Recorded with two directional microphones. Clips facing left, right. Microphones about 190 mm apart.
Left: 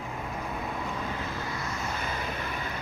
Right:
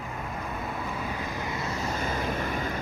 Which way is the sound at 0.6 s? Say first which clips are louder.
Even; 10° right (ahead or behind).